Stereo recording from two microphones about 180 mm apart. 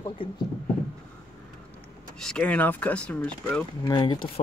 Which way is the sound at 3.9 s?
25° left (ahead or behind).